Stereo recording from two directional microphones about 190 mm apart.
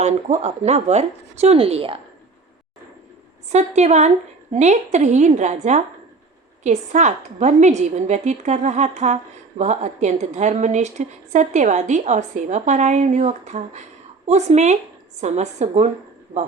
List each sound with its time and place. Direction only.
0.0 s a woman's voice: 35° right (ahead or behind)
3.5 s a woman's voice: 35° right (ahead or behind)